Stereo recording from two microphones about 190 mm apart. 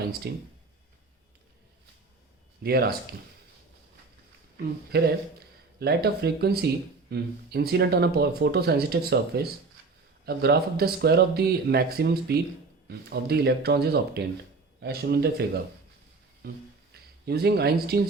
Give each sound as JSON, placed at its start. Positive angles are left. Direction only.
{"t": 0.2, "sound": "speech", "side_deg": -55}
{"t": 2.6, "sound": "speech", "side_deg": -55}
{"t": 4.9, "sound": "speech", "side_deg": -55}